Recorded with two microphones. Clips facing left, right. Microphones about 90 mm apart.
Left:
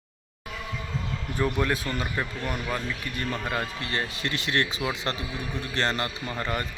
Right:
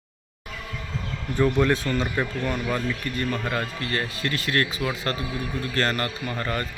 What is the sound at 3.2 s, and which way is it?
A man's voice, 15° left (ahead or behind).